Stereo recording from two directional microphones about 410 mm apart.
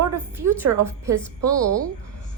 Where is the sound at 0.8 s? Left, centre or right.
Centre.